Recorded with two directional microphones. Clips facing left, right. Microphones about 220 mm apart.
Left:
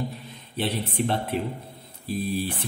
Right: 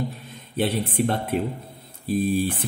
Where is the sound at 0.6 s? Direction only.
50° right (ahead or behind).